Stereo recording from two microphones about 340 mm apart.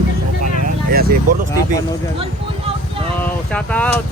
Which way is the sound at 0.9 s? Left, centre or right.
Right.